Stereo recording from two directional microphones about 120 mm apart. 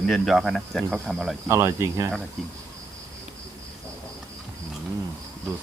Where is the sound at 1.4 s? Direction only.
25° right (ahead or behind).